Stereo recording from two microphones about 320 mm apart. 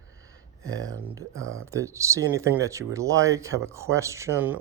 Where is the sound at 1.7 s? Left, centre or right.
Centre.